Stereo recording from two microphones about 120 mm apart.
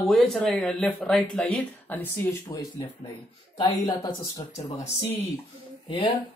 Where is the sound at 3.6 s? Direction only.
35° left (ahead or behind).